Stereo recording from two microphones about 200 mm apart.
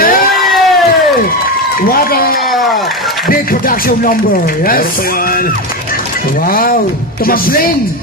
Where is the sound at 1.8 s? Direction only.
45° left (ahead or behind).